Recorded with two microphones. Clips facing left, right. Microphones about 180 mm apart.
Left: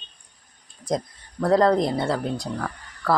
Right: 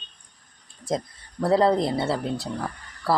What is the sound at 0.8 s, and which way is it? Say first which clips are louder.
Speech: left 1 dB; 5° right (ahead or behind).